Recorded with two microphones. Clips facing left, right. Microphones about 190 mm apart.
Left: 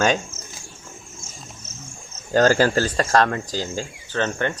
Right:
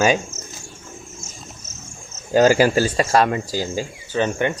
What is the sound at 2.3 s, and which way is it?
Speech, 10° right (ahead or behind).